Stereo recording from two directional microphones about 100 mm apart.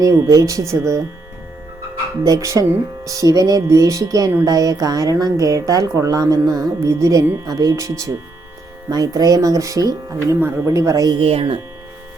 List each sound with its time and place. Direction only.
0.0 s speech: 35° right (ahead or behind)
2.2 s speech: 35° right (ahead or behind)
11.2 s speech: 70° right (ahead or behind)